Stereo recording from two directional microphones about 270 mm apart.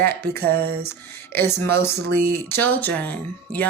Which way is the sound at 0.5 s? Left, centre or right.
Right.